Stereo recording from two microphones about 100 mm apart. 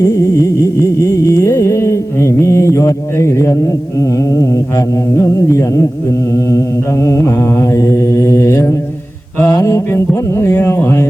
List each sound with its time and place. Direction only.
0.0 s music: 30° left (ahead or behind)
5.1 s carnatic music: 30° left (ahead or behind)
7.0 s mantra: 30° left (ahead or behind)
10.7 s carnatic music: 25° left (ahead or behind)